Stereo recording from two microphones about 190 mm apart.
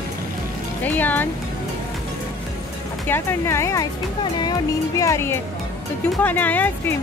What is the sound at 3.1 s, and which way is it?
Speech, 10° left (ahead or behind).